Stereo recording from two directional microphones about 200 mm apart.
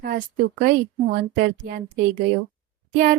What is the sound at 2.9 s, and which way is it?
Speech, 45° right (ahead or behind).